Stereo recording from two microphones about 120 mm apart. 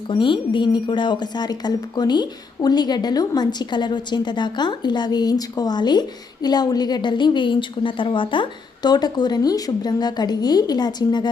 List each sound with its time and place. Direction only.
0.1 s a woman's voice: 45° left (ahead or behind)